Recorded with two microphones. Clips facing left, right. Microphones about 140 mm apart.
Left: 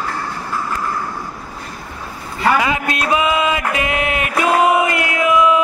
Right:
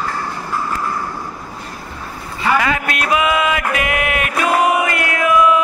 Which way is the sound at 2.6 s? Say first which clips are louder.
Even; 20° left (ahead or behind).